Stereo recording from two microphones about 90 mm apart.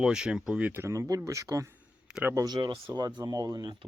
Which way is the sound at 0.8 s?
35° right (ahead or behind).